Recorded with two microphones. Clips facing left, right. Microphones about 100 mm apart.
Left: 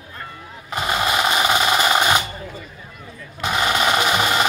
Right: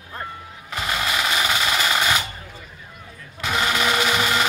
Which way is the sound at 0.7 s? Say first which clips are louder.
Left 4 dB; 20° left (ahead or behind).